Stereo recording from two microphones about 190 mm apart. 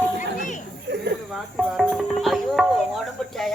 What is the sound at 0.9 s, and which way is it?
Speech, 65° right (ahead or behind).